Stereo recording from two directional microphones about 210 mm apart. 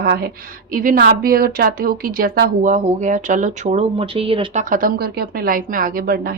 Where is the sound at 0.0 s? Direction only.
50° right (ahead or behind).